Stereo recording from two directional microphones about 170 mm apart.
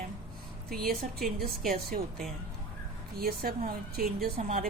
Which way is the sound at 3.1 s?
65° right (ahead or behind).